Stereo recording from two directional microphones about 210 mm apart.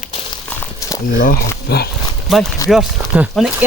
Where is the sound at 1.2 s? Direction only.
45° left (ahead or behind).